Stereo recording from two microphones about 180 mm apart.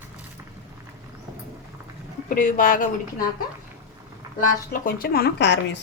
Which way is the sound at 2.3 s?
50° left (ahead or behind).